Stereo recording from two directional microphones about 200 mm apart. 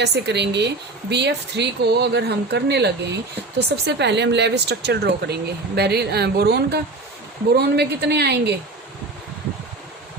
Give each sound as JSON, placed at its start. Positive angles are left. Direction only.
{"t": 0.0, "sound": "speech", "side_deg": -60}